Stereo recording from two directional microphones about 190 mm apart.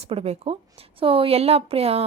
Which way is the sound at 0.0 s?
30° right (ahead or behind).